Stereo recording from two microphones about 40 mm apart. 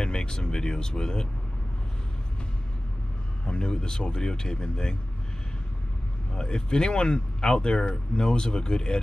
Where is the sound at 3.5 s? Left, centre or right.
Left.